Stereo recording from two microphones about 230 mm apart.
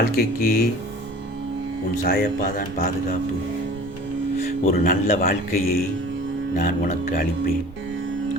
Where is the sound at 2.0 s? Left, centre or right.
Left.